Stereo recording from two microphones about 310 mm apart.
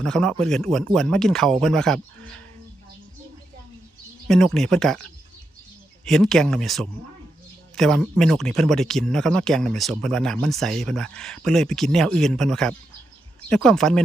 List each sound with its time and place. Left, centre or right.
0.0 s speech: centre
4.3 s speech: centre
6.1 s speech: centre